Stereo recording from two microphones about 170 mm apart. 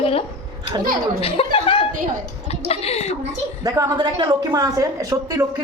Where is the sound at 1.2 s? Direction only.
30° left (ahead or behind).